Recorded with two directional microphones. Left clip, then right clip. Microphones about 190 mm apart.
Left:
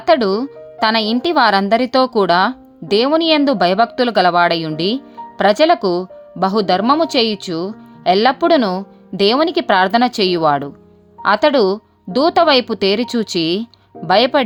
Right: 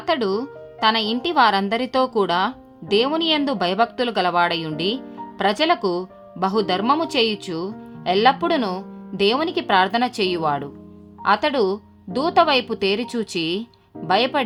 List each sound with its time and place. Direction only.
0.0 s speech: 40° left (ahead or behind)